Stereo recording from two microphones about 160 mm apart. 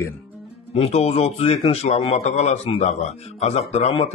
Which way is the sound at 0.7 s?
40° left (ahead or behind).